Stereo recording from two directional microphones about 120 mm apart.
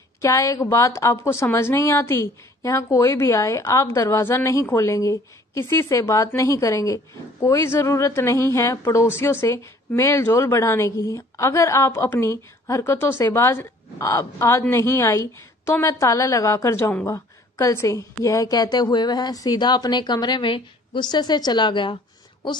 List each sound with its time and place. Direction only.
0.2 s a woman's voice: 25° left (ahead or behind)